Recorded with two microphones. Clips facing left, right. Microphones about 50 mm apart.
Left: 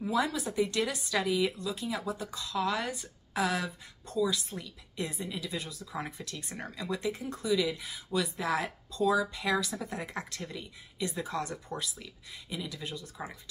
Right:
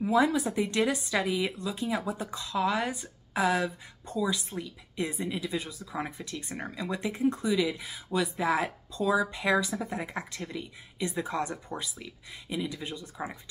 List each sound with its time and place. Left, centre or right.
0.3 s speech: right